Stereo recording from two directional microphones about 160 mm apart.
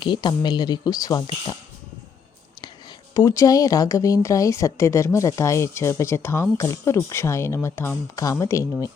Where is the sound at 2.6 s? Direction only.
30° left (ahead or behind).